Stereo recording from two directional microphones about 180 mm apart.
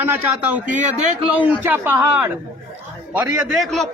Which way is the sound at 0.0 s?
10° right (ahead or behind).